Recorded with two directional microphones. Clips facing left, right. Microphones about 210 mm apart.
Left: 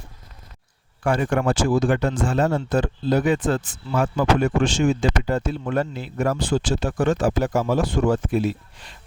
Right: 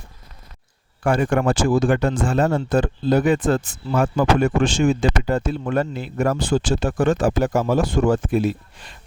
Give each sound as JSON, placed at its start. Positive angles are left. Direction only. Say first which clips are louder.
{"t": 1.0, "sound": "speech", "louder": "right 2 dB", "side_deg": -50}